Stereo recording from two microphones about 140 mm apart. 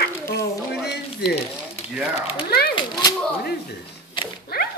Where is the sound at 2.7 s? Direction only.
30° left (ahead or behind).